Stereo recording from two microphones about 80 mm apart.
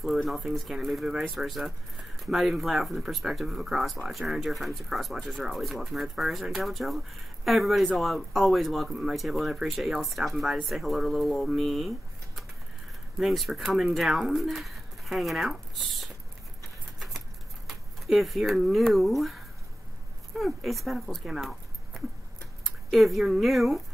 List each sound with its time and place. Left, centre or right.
0.0 s speech: centre
13.2 s speech: centre
17.6 s speech: centre